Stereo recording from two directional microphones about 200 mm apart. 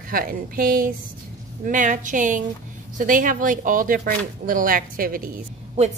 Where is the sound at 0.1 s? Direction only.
45° right (ahead or behind).